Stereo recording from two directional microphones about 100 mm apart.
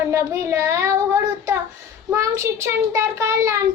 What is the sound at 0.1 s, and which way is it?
A child's voice, 30° right (ahead or behind).